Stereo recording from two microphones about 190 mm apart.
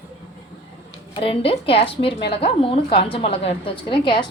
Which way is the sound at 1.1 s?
30° left (ahead or behind).